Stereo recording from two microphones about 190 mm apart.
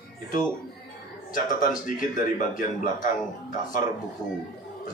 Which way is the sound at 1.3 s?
45° left (ahead or behind).